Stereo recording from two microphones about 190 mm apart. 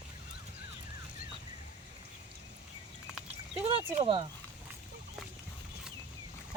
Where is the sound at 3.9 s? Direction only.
30° right (ahead or behind).